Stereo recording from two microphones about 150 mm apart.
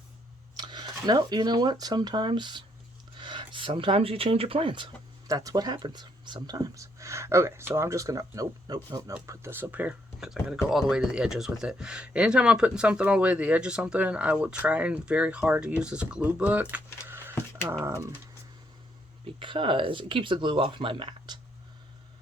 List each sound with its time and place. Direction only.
0.5 s speech: 30° right (ahead or behind)
5.3 s speech: 25° right (ahead or behind)
16.7 s a sound: 15° right (ahead or behind)
17.7 s speech: 20° right (ahead or behind)
19.4 s speech: 35° right (ahead or behind)